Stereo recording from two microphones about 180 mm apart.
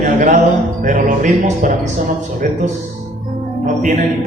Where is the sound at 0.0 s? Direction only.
45° right (ahead or behind).